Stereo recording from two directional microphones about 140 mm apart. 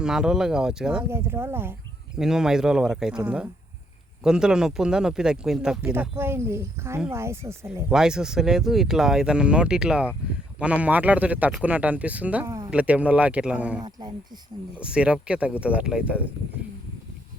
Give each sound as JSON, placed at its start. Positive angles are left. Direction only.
{"t": 0.0, "sound": "speech", "side_deg": -5}
{"t": 1.0, "sound": "speech", "side_deg": -15}
{"t": 2.1, "sound": "speech", "side_deg": -5}
{"t": 5.8, "sound": "speech", "side_deg": -15}
{"t": 7.9, "sound": "speech", "side_deg": -5}